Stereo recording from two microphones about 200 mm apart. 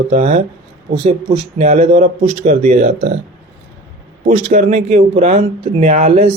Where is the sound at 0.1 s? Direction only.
35° right (ahead or behind).